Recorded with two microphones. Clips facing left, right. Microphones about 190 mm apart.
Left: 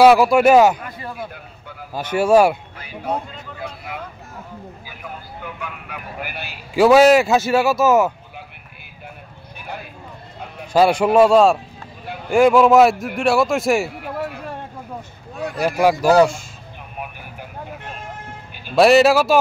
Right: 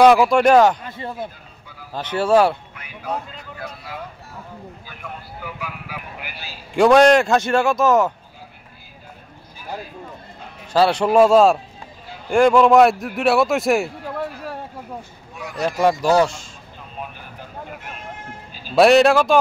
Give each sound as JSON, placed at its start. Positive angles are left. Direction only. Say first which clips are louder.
{"t": 0.0, "sound": "speech", "louder": "left 1 dB", "side_deg": 5}
{"t": 0.8, "sound": "a man's voice", "louder": "right 1 dB", "side_deg": -25}
{"t": 1.3, "sound": "a sound", "louder": "left 7 dB", "side_deg": 60}
{"t": 2.0, "sound": "speech", "louder": "left 2 dB", "side_deg": 10}
{"t": 2.8, "sound": "speech", "louder": "left 3 dB", "side_deg": 30}
{"t": 5.4, "sound": "a man's voice", "louder": "right 1 dB", "side_deg": -5}
{"t": 6.1, "sound": "a man's voice", "louder": "left 5 dB", "side_deg": 55}
{"t": 6.7, "sound": "a man's voice", "louder": "left 1 dB", "side_deg": 5}
{"t": 10.7, "sound": "a man's voice", "louder": "left 2 dB", "side_deg": 10}
{"t": 15.3, "sound": "speech", "louder": "left 6 dB", "side_deg": 30}
{"t": 15.8, "sound": "speech", "louder": "left 3 dB", "side_deg": 5}
{"t": 18.5, "sound": "music", "louder": "even", "side_deg": 60}
{"t": 18.8, "sound": "a man's voice", "louder": "even", "side_deg": 0}